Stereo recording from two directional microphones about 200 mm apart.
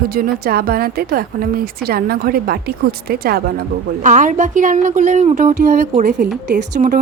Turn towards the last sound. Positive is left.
turn(degrees=-60)  # may be behind; listen again after turning